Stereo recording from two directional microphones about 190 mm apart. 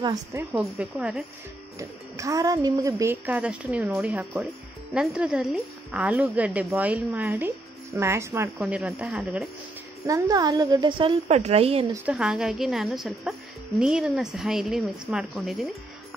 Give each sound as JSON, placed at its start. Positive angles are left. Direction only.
{"t": 0.0, "sound": "a woman's voice", "side_deg": -15}
{"t": 0.6, "sound": "a woman's voice", "side_deg": -5}
{"t": 1.8, "sound": "a woman's voice", "side_deg": -15}
{"t": 10.0, "sound": "a woman's voice", "side_deg": -20}
{"t": 12.1, "sound": "a woman's voice", "side_deg": -5}